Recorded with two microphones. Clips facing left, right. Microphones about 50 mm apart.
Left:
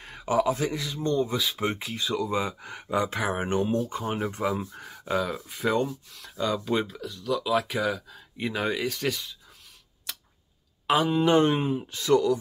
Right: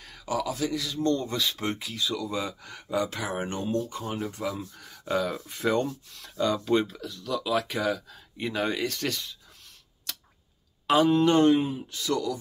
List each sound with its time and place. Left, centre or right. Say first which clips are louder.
0.0 s speech: left 6 dB; left; by 1.8 s centre
1.8 s speech: left 2 dB; left
5.0 s speech: even; centre
10.1 s tick-tock: even; centre
10.9 s speech: right 1 dB; centre; by 12.4 s left